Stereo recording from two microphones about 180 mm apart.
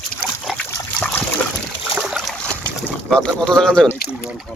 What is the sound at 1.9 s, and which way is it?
Boat, 5° right (ahead or behind).